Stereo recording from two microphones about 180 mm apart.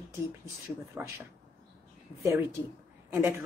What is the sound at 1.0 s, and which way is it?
Speech, 15° right (ahead or behind).